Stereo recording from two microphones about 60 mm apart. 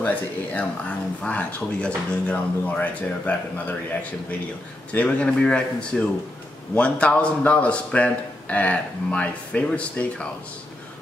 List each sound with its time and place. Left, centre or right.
0.0 s speech: left
4.9 s speech: left